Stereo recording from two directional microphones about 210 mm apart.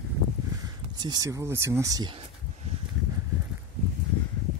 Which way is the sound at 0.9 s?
20° right (ahead or behind).